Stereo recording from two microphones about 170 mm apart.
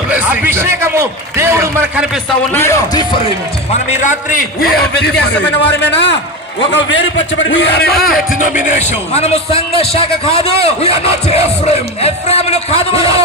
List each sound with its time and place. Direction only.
0.1 s a sound: 10° right (ahead or behind)
2.6 s speech: 15° left (ahead or behind)
3.8 s a man's voice: 45° left (ahead or behind); by 7.0 s 90° left
7.6 s a man's voice: 75° left (ahead or behind)
8.4 s a man's voice: 45° left (ahead or behind)